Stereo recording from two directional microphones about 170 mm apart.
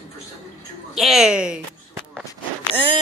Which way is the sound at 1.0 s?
Centre (ahead or behind).